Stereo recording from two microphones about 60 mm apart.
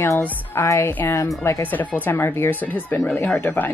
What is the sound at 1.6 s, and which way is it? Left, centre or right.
Speech, left.